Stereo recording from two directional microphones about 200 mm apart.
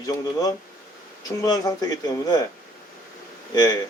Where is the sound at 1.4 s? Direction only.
20° left (ahead or behind).